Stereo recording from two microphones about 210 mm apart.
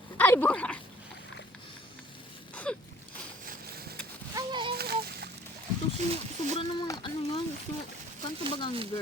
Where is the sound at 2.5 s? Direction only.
5° left (ahead or behind).